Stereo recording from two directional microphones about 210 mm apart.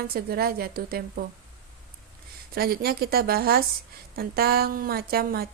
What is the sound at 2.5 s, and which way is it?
Speech, 45° right (ahead or behind).